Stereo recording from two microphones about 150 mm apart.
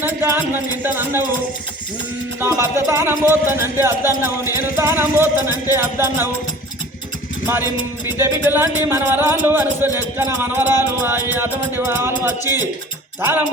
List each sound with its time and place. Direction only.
0.0 s music: 15° right (ahead or behind)
2.4 s music: 20° right (ahead or behind)
7.4 s music: 15° right (ahead or behind)